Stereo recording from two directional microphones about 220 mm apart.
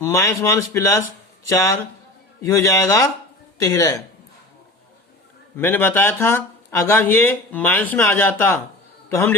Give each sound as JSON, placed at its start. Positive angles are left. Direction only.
{"t": 0.0, "sound": "speech", "side_deg": 15}
{"t": 5.5, "sound": "a man's voice", "side_deg": 10}